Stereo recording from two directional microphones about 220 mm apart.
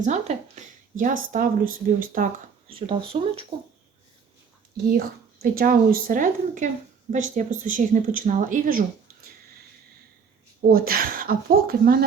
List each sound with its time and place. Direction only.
0.0 s speech: 30° right (ahead or behind)
2.6 s speech: 25° right (ahead or behind)
4.9 s speech: 45° right (ahead or behind)
10.7 s speech: 40° right (ahead or behind)